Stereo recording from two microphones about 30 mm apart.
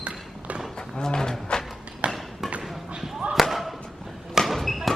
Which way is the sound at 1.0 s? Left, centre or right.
Left.